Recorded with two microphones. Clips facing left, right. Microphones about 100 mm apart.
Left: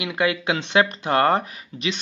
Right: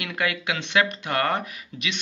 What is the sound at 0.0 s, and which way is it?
Speech, 20° left (ahead or behind).